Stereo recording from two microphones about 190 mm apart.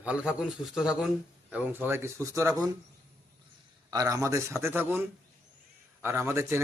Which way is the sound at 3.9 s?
15° right (ahead or behind).